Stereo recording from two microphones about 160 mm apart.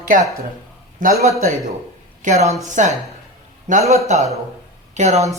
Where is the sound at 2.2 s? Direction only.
45° right (ahead or behind).